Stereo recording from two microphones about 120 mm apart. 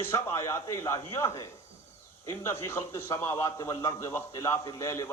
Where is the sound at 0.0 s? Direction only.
20° left (ahead or behind).